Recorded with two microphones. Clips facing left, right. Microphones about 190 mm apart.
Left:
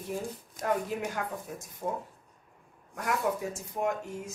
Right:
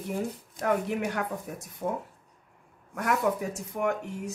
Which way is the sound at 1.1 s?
70° right (ahead or behind).